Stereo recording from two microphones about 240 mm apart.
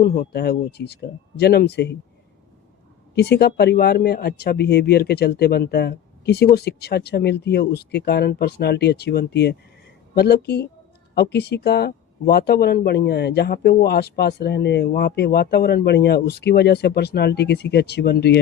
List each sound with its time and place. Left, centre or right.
0.0 s speech: left
3.2 s speech: left